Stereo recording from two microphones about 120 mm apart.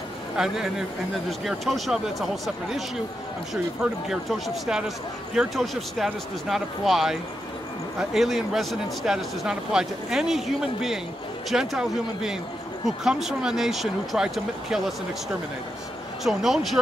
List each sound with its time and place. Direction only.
0.4 s speech: 5° right (ahead or behind)
4.1 s speech: 5° right (ahead or behind)
16.3 s speech: centre (ahead or behind)